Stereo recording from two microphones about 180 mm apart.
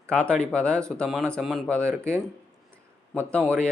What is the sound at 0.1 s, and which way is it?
Speech, 5° left (ahead or behind).